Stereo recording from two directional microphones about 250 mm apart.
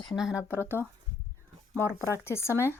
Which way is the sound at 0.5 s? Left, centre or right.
Centre.